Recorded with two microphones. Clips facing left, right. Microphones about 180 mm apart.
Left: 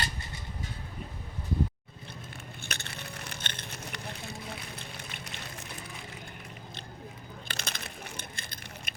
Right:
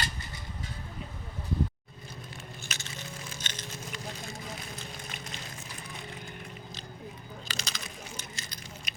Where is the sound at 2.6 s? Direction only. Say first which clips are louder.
Left 3 dB; 60° left (ahead or behind).